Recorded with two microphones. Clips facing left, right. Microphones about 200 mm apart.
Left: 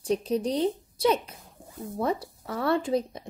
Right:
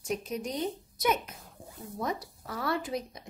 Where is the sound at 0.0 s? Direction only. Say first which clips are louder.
Left 8 dB; 30° left (ahead or behind).